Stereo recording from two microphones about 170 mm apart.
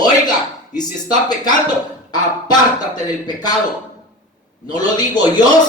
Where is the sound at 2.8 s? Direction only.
25° left (ahead or behind).